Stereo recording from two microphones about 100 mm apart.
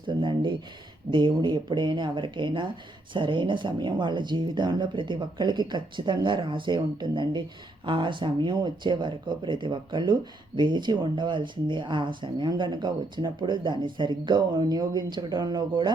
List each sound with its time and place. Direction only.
0.1 s speech: 50° right (ahead or behind)